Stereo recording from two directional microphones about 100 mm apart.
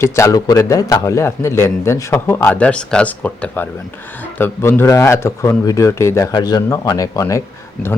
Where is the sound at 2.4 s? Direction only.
15° left (ahead or behind); by 6.3 s 30° left (ahead or behind).